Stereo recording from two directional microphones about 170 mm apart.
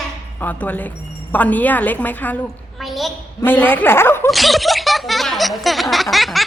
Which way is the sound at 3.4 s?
10° left (ahead or behind).